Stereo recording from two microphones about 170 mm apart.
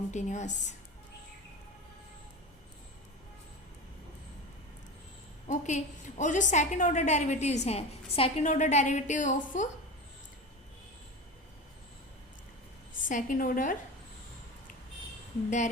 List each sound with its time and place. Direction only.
0.1 s a woman's voice: 45° left (ahead or behind)
5.5 s a woman's voice: 45° left (ahead or behind)
13.1 s a woman's voice: 50° left (ahead or behind)
15.4 s a woman's voice: 45° left (ahead or behind)